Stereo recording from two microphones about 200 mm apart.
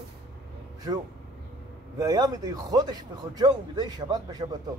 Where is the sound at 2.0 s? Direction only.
20° right (ahead or behind).